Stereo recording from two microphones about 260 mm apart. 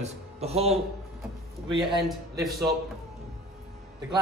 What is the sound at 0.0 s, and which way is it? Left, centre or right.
A man's voice, right.